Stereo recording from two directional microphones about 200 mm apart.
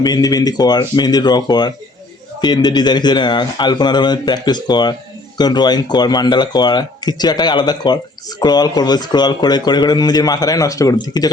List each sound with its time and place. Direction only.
0.0 s speech: 20° left (ahead or behind)